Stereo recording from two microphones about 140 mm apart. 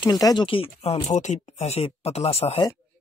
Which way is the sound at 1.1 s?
55° left (ahead or behind).